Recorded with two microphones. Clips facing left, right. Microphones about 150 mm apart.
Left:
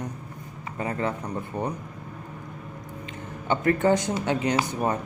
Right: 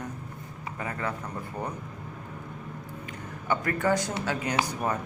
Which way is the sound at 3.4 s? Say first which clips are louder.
Left 5 dB; 25° left (ahead or behind).